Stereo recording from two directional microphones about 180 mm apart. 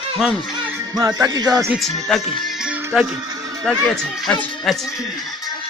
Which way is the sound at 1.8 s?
Centre (ahead or behind).